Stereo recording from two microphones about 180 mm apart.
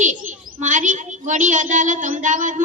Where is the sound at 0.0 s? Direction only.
45° right (ahead or behind).